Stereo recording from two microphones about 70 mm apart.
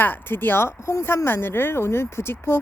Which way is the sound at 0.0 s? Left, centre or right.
Left.